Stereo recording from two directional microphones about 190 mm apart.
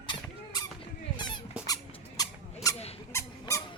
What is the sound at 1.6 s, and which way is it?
Dog, 20° left (ahead or behind).